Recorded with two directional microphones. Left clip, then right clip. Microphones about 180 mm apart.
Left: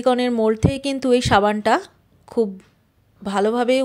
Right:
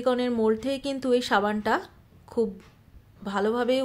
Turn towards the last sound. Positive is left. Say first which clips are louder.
# left 6 dB
turn(degrees=40)  # may be behind; listen again after turning